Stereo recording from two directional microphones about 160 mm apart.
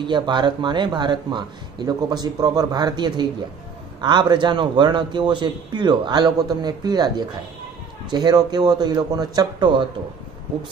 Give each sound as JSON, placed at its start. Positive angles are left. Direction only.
{"t": 0.0, "sound": "speech", "side_deg": -30}